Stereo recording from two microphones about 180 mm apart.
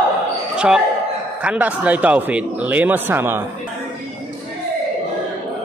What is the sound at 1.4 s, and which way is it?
Speech, 10° right (ahead or behind).